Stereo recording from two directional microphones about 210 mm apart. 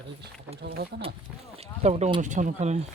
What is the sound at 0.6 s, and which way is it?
Speech, 45° right (ahead or behind).